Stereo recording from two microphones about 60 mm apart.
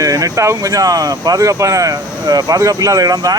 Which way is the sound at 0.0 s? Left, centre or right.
Right.